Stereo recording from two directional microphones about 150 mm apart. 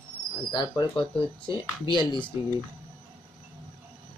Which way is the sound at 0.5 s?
30° left (ahead or behind).